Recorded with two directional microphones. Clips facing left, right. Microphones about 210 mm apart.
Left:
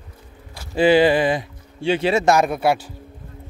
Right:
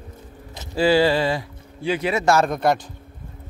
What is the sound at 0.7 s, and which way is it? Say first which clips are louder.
Speech: left 3 dB; 20° left (ahead or behind).